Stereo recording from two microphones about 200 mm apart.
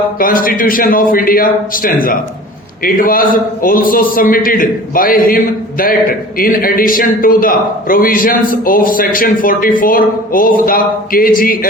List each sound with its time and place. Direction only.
0.2 s a man's voice: 45° left (ahead or behind)